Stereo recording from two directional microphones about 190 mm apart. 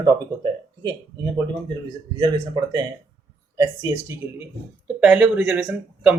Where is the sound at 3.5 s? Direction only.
20° right (ahead or behind).